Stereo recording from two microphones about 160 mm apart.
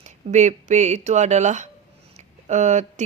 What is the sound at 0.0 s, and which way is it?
Speech, 45° right (ahead or behind).